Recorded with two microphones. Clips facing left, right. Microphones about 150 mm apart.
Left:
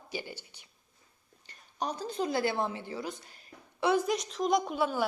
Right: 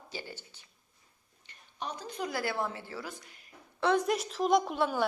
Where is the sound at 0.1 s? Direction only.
15° left (ahead or behind).